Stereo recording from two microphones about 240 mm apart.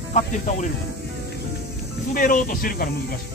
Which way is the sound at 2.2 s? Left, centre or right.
Left.